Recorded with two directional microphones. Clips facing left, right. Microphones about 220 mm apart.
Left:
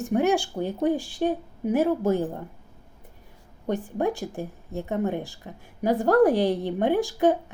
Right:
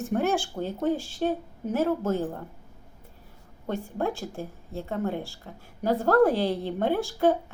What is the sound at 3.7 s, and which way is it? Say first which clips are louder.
A woman's voice: left 3 dB; 15° left (ahead or behind).